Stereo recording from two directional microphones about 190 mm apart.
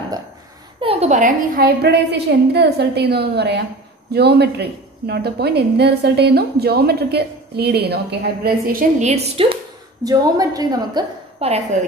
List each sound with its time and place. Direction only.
0.7 s a woman's voice: 30° right (ahead or behind)
10.0 s a woman's voice: 20° right (ahead or behind)